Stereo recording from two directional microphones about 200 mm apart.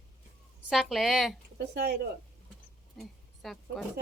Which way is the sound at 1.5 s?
55° right (ahead or behind).